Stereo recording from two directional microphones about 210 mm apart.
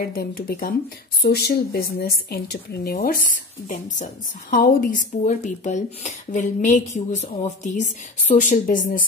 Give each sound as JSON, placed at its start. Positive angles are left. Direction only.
{"t": 0.1, "sound": "a woman's voice", "side_deg": 45}